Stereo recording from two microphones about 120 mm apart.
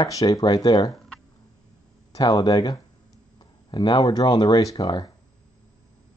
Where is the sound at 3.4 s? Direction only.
40° left (ahead or behind).